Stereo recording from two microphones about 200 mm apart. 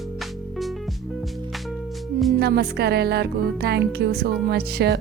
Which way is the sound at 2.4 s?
55° right (ahead or behind).